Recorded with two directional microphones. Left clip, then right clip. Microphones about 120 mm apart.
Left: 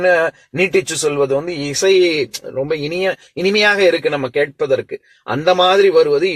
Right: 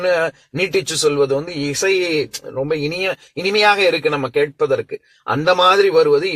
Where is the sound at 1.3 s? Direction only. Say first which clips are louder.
Left 2 dB; 45° left (ahead or behind).